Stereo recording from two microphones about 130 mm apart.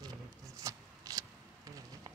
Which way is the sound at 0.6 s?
25° right (ahead or behind).